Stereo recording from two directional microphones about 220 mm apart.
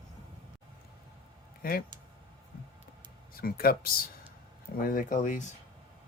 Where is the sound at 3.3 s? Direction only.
40° left (ahead or behind).